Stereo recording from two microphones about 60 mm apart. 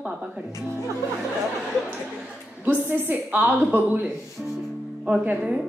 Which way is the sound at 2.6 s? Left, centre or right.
Right.